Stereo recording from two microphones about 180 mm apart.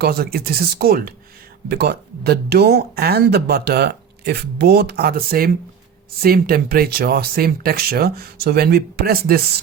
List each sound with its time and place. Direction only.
0.0 s speech: 60° right (ahead or behind)